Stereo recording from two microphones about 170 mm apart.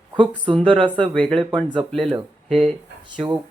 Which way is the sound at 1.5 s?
30° right (ahead or behind).